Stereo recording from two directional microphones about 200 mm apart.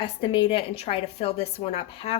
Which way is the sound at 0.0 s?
25° left (ahead or behind).